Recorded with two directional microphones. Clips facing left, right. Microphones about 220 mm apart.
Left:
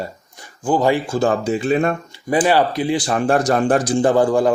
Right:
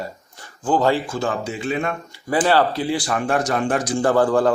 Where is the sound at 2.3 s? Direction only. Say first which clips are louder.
Left 2 dB; 15° left (ahead or behind); by 4.0 s 30° left (ahead or behind).